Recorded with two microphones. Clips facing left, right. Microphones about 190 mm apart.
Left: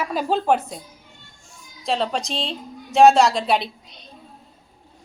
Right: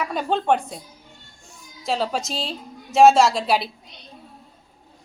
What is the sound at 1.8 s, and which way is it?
A woman's voice, centre (ahead or behind).